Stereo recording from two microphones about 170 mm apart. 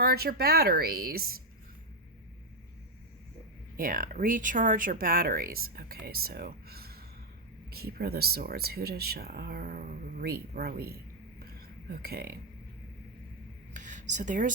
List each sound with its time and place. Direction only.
0.0 s speech: 65° right (ahead or behind)
3.8 s speech: 55° right (ahead or behind)
13.7 s speech: 45° right (ahead or behind)